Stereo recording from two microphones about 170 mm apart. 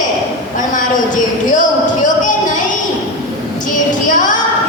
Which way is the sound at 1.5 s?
50° left (ahead or behind).